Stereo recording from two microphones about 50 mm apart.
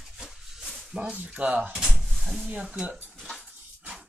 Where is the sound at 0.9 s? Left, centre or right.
Right.